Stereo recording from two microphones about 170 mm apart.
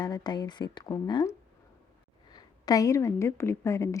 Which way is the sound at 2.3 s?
20° left (ahead or behind).